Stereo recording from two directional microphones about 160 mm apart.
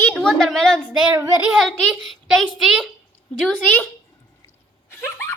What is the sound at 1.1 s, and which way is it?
Child singing, 20° right (ahead or behind).